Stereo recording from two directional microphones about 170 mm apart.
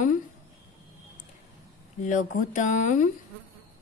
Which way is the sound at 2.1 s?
50° left (ahead or behind).